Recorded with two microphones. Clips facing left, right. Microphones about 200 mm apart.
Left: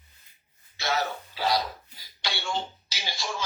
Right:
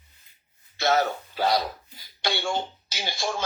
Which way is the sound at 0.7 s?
50° right (ahead or behind).